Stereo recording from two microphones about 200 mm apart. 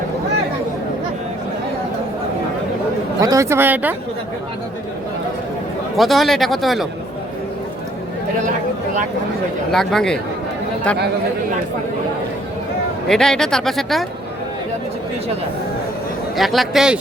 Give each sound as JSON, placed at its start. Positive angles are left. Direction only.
{"t": 3.2, "sound": "a woman's voice", "side_deg": -15}
{"t": 6.0, "sound": "speech", "side_deg": 0}
{"t": 9.7, "sound": "speech", "side_deg": 0}
{"t": 13.1, "sound": "speech", "side_deg": 0}
{"t": 16.4, "sound": "speech", "side_deg": 0}